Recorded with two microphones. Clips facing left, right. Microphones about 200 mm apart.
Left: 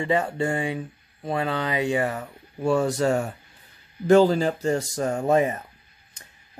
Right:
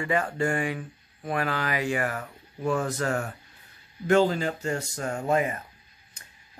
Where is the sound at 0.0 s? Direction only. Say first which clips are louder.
Left 3 dB; 25° left (ahead or behind).